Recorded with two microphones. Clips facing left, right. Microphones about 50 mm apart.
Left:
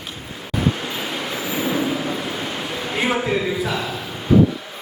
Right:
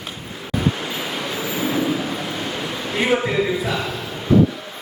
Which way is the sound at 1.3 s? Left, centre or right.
Centre.